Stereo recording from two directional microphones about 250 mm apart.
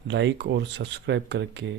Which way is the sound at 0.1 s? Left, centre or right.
Right.